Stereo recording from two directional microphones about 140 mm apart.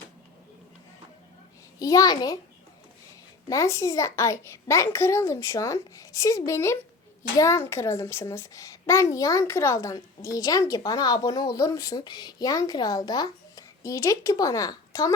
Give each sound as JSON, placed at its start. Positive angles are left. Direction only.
{"t": 1.8, "sound": "a child's voice", "side_deg": 25}
{"t": 3.5, "sound": "a child's voice", "side_deg": 20}